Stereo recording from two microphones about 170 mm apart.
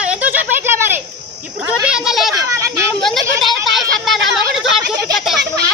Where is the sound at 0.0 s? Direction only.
10° right (ahead or behind).